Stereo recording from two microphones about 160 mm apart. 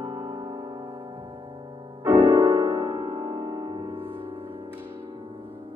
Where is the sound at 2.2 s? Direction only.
25° right (ahead or behind).